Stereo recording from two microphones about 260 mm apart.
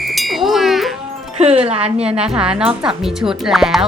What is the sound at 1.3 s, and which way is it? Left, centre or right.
Speech, right.